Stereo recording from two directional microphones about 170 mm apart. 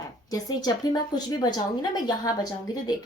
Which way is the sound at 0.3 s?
20° left (ahead or behind).